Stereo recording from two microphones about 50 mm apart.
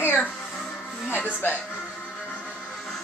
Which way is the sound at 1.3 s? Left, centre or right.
Left.